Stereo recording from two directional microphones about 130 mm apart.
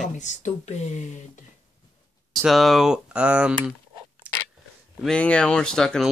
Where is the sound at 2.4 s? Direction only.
Centre (ahead or behind).